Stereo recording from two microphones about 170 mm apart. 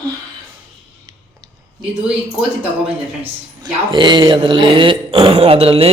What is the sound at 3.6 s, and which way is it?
Speech, 25° right (ahead or behind).